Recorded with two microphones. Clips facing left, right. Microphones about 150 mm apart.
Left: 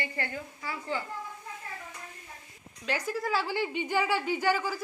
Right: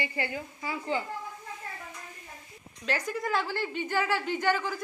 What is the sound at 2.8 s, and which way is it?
A woman's voice, 10° left (ahead or behind).